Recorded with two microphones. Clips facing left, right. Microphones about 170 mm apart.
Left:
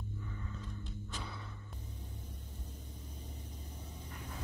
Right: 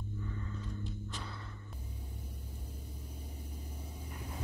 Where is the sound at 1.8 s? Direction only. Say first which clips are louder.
Right 1 dB; 10° right (ahead or behind).